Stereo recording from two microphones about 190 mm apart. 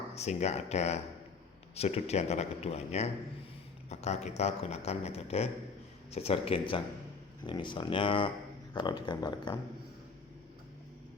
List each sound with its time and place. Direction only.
0.1 s a man's voice: 35° left (ahead or behind)